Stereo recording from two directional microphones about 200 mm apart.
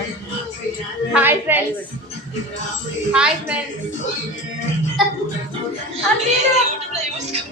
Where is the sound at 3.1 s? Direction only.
5° right (ahead or behind).